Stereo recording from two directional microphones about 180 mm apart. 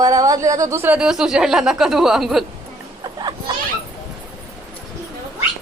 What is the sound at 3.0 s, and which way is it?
Music, 25° right (ahead or behind).